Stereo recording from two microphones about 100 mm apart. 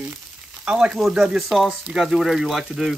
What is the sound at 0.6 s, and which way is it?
Speech, 10° right (ahead or behind).